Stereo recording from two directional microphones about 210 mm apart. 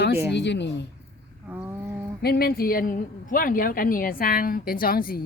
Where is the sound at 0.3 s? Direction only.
55° left (ahead or behind).